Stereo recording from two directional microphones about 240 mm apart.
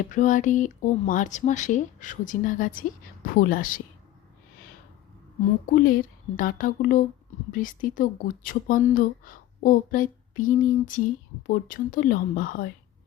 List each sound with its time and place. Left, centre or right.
0.1 s speech: left
5.7 s speech: left